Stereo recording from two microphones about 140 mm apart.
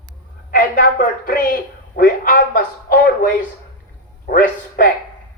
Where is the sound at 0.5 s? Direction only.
80° left.